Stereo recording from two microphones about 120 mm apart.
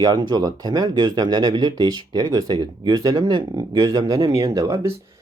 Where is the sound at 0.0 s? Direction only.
35° right (ahead or behind).